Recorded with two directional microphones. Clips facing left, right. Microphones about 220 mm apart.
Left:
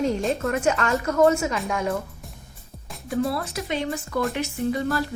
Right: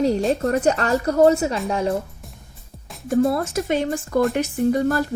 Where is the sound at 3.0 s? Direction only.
45° right (ahead or behind).